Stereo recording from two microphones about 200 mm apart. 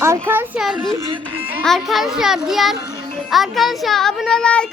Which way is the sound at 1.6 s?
Centre (ahead or behind).